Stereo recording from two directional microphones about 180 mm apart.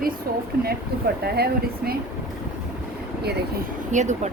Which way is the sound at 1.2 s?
60° right (ahead or behind).